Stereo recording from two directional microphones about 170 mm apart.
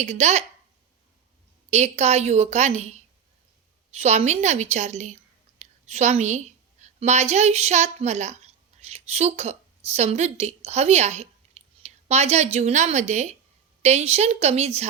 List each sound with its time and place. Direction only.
0.0 s a woman's voice: 40° right (ahead or behind)
1.7 s a woman's voice: 40° right (ahead or behind)
5.5 s a sound: 45° right (ahead or behind)
7.0 s a woman's voice: 40° right (ahead or behind)